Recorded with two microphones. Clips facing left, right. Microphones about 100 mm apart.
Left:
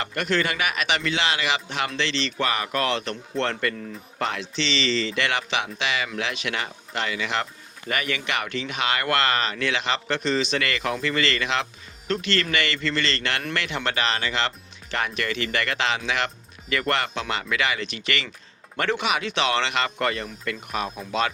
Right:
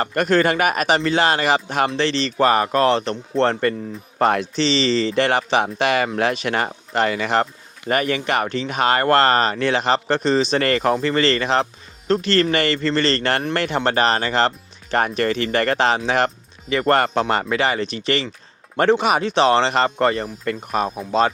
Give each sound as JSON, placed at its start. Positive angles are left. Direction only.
{"t": 0.0, "sound": "speech", "side_deg": -45}
{"t": 4.2, "sound": "speech", "side_deg": -45}
{"t": 16.6, "sound": "speech", "side_deg": -30}
{"t": 16.9, "sound": "speech", "side_deg": -45}